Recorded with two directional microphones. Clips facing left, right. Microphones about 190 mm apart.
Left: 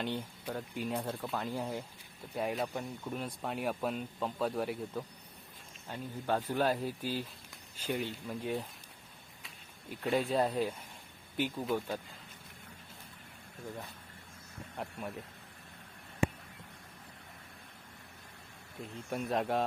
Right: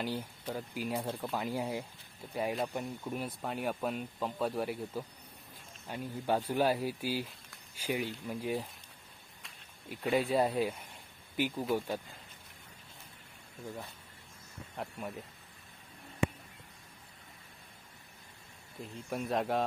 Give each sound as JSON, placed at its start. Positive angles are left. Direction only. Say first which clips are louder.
{"t": 0.0, "sound": "speech", "louder": "even", "side_deg": -5}
{"t": 5.9, "sound": "speech", "louder": "right 2 dB", "side_deg": -10}
{"t": 9.9, "sound": "speech", "louder": "right 1 dB", "side_deg": -5}
{"t": 14.8, "sound": "speech", "louder": "even", "side_deg": 0}
{"t": 18.8, "sound": "speech", "louder": "even", "side_deg": 0}